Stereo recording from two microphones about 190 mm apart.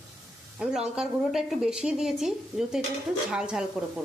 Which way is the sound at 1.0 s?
5° right (ahead or behind).